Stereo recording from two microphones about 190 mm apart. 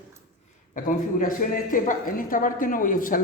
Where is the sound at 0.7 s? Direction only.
45° left (ahead or behind).